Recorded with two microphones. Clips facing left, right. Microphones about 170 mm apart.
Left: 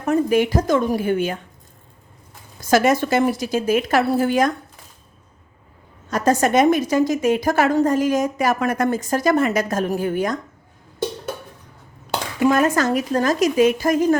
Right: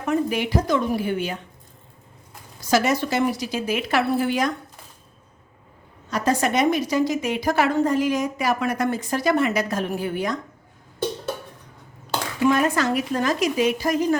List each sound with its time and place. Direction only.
0.0 s a woman's voice: 45° left (ahead or behind)
2.6 s a woman's voice: 50° left (ahead or behind)
6.1 s a woman's voice: 45° left (ahead or behind)
12.4 s a woman's voice: 45° left (ahead or behind)